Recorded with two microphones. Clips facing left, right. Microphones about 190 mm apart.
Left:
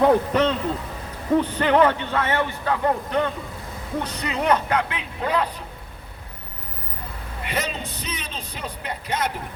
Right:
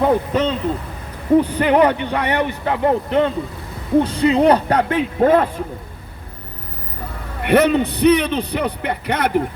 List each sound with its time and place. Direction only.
0.0 s a man's voice: 10° right (ahead or behind); by 5.6 s 50° right (ahead or behind)
7.4 s a man's voice: 60° right (ahead or behind)